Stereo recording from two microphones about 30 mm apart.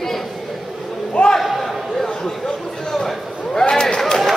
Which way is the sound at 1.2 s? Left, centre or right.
Left.